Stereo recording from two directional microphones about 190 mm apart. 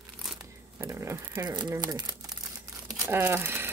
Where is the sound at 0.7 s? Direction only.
15° right (ahead or behind).